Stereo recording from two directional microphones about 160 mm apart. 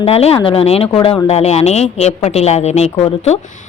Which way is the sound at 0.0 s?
40° left (ahead or behind).